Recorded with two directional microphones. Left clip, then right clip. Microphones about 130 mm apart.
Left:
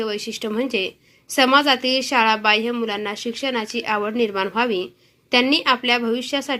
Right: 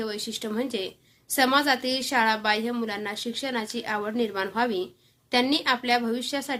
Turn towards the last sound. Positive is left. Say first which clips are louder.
# left 6 dB
turn(degrees=15)  # may be behind; listen again after turning